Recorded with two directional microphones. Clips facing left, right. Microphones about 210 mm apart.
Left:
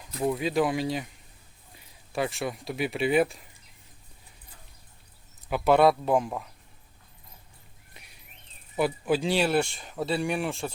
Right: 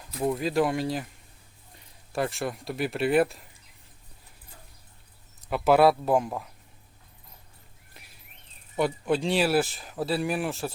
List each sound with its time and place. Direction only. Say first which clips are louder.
0.0 s speech: even; centre (ahead or behind)
2.1 s speech: even; centre (ahead or behind)
5.5 s speech: right 1 dB; centre (ahead or behind)
7.9 s a sound: even; centre (ahead or behind)
8.7 s speech: even; 5° left (ahead or behind)